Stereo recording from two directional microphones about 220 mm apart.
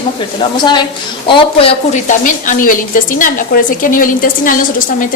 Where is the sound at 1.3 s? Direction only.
25° left (ahead or behind).